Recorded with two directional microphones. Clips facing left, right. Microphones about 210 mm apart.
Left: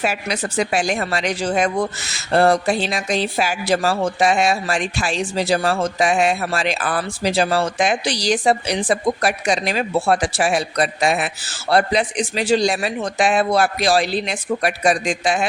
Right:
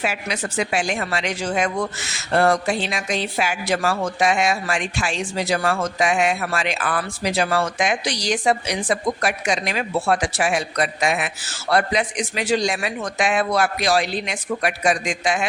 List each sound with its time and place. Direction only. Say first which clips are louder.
0.0 s speech: left 3 dB; 40° left (ahead or behind)